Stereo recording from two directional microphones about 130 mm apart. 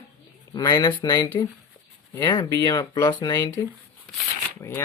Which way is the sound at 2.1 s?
20° left (ahead or behind).